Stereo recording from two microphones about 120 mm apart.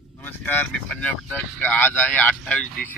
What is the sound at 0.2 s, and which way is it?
Vehicle, 15° left (ahead or behind).